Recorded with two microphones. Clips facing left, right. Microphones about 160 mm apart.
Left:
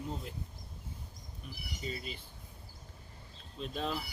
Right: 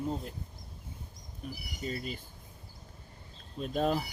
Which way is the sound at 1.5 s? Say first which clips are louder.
Right 4 dB; 45° right (ahead or behind).